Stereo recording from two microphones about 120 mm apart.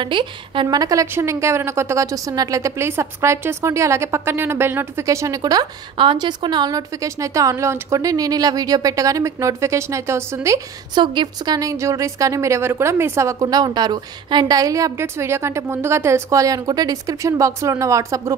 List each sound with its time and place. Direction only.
0.0 s a woman's voice: 40° right (ahead or behind); by 10.6 s 25° right (ahead or behind)
11.0 s a woman's voice: 35° right (ahead or behind)